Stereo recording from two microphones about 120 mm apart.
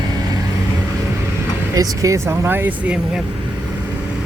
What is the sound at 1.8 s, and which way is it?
Speech, 25° right (ahead or behind).